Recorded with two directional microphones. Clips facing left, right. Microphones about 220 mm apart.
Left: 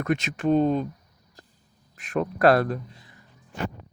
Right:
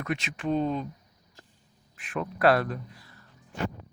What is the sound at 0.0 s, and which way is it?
Speech, 45° left (ahead or behind).